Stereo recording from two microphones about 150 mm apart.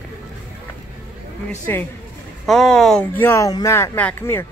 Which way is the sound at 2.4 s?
5° left (ahead or behind).